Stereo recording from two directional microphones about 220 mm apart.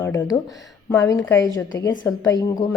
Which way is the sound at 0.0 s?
10° left (ahead or behind).